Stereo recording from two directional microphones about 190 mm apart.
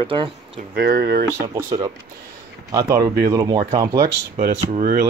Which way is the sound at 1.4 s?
15° right (ahead or behind).